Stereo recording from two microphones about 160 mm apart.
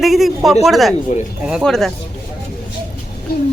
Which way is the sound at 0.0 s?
Centre (ahead or behind).